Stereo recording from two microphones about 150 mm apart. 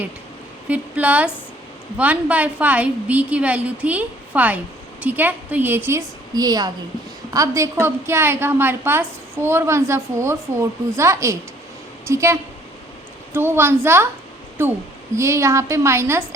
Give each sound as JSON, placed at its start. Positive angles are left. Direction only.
{"t": 0.7, "sound": "a woman's voice", "side_deg": -10}